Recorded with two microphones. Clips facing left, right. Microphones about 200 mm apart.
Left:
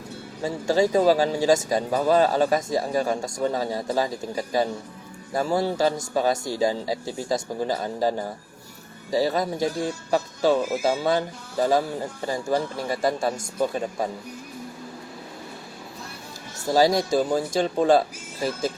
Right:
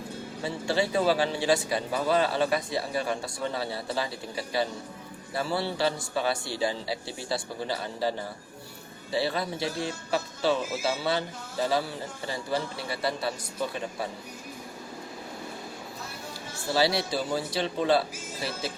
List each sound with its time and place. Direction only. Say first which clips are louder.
0.4 s a man's voice: left 6 dB; 40° left (ahead or behind)
16.6 s a man's voice: left 6 dB; 45° left (ahead or behind)